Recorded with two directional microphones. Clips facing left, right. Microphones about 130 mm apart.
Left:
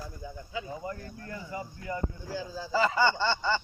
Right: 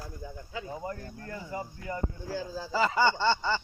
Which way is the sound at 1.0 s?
35° right (ahead or behind).